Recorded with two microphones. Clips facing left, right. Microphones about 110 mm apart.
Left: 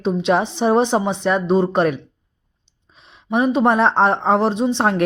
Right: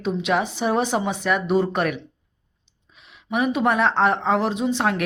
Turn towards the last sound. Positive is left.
turn(degrees=30)  # may be behind; listen again after turning